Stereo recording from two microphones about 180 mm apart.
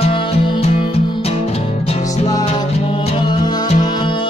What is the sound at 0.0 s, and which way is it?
Music, 30° left (ahead or behind).